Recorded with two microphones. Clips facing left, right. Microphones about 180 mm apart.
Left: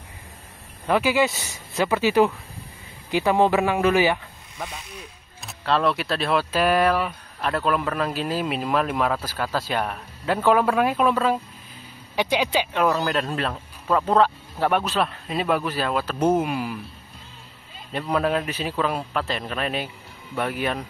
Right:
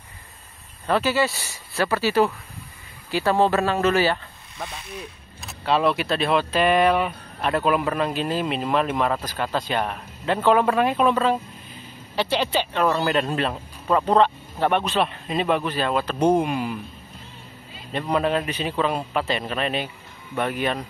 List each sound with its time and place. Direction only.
0.8 s speech: 15° left (ahead or behind)
5.4 s speech: centre (ahead or behind)
18.1 s speech: centre (ahead or behind)